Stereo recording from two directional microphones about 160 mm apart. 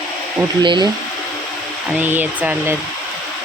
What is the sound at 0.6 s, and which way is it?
Speech, 30° right (ahead or behind).